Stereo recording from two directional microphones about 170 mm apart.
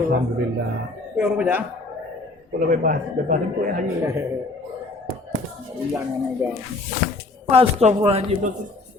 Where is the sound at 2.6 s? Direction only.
55° right (ahead or behind).